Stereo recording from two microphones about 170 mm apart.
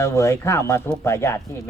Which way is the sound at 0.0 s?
15° left (ahead or behind).